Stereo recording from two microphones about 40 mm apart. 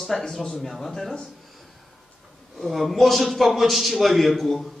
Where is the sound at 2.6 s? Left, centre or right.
Centre.